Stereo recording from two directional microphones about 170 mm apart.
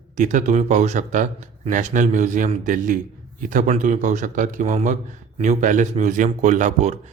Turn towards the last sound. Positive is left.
turn(degrees=-45)  # may be behind; listen again after turning